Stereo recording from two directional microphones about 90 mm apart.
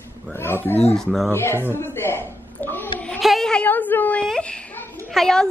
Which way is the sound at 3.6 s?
20° left (ahead or behind).